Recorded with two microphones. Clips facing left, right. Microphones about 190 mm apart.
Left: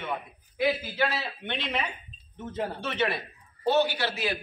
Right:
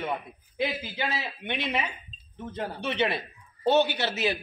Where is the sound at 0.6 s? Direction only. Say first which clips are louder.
Left 4 dB; 20° right (ahead or behind).